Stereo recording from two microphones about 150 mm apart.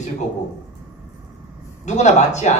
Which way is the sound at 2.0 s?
50° left (ahead or behind).